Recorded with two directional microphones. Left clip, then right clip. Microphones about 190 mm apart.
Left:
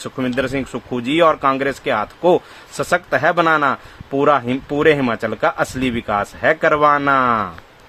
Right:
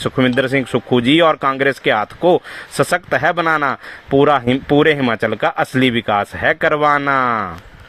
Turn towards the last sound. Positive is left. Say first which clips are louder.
# even
turn(degrees=-25)  # may be behind; listen again after turning